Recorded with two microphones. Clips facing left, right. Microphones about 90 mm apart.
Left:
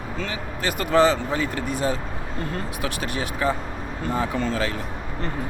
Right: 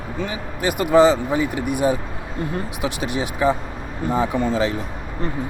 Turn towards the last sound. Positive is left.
turn(degrees=-20)  # may be behind; listen again after turning